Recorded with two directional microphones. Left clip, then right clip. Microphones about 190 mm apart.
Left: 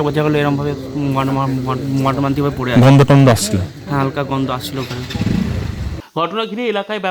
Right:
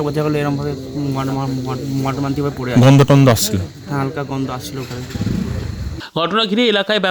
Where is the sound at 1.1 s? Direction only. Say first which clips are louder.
Left 6 dB; 15° left (ahead or behind).